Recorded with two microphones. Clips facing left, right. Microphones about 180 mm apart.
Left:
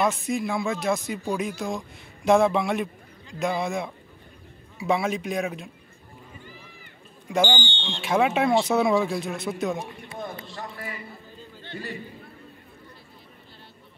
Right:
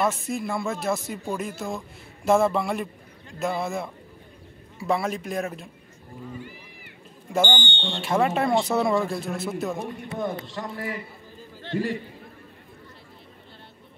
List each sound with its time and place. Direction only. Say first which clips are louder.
0.0 s speech: left 1 dB; centre (ahead or behind)
7.3 s speech: left 1 dB; centre (ahead or behind)
9.8 s a man's voice: right 4 dB; 70° right (ahead or behind)
11.6 s a man's voice: right 9 dB; 90° right